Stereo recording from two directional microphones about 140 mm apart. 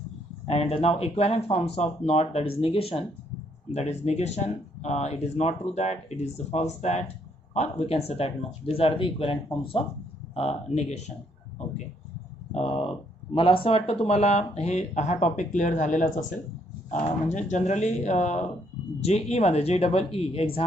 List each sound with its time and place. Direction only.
0.4 s speech: 45° left (ahead or behind)
10.3 s speech: 50° left (ahead or behind)
12.5 s speech: 50° left (ahead or behind)